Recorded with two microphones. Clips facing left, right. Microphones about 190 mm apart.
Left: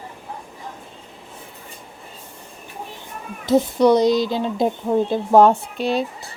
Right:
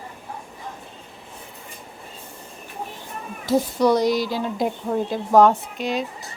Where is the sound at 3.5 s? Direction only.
20° left (ahead or behind).